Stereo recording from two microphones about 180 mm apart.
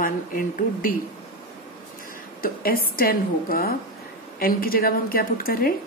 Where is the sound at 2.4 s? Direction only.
55° left (ahead or behind).